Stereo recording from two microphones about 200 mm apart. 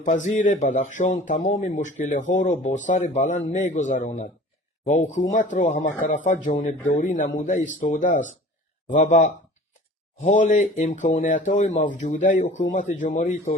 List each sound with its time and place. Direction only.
0.3 s speech: 40° left (ahead or behind)